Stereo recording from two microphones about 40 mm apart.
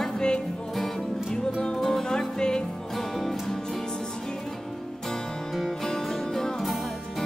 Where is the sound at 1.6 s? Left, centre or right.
Left.